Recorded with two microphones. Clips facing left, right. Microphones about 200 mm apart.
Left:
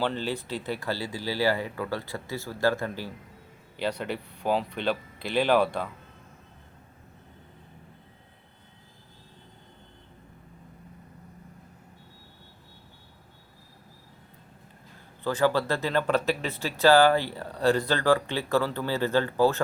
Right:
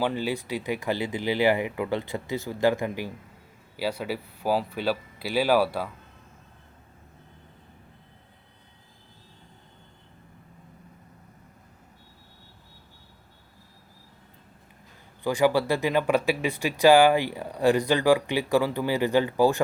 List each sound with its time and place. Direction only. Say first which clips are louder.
0.0 s speech: right 2 dB; 10° right (ahead or behind)
15.2 s speech: right 2 dB; 15° right (ahead or behind)